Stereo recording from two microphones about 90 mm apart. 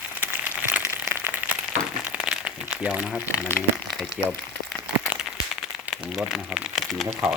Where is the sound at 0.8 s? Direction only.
30° right (ahead or behind).